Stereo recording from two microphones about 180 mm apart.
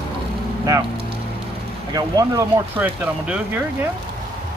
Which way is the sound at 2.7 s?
10° right (ahead or behind).